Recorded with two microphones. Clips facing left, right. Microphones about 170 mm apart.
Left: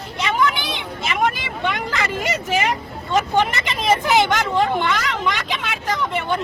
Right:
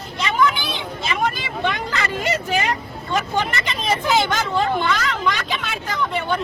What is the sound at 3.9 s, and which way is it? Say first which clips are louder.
Speech: left 3 dB; 20° left (ahead or behind).